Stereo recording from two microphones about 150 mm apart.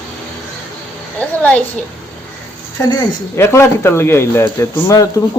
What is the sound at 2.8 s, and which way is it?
A man's voice, 25° left (ahead or behind).